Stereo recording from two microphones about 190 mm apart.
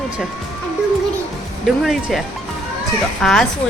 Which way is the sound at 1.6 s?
Centre (ahead or behind).